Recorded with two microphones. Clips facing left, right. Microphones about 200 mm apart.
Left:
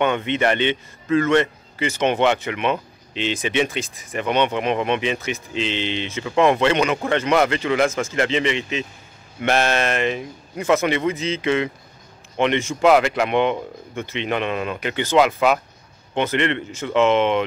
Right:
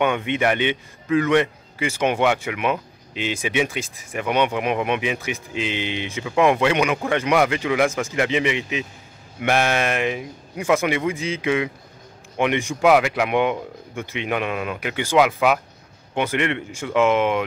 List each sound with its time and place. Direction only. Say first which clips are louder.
0.0 s a man's voice: left 1 dB; 10° right (ahead or behind)